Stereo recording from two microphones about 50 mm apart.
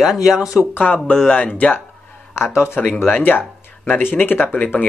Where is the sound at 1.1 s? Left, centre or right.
Centre.